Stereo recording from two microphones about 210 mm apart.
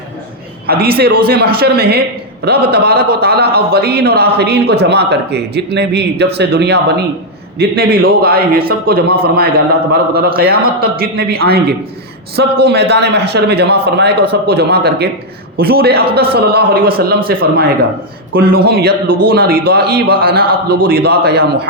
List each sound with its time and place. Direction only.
0.7 s speech: 45° right (ahead or behind)